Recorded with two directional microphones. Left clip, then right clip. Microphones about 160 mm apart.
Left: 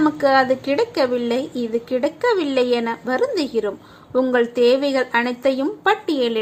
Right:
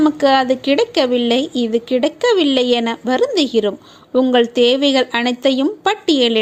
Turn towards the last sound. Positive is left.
turn(degrees=-45)  # may be behind; listen again after turning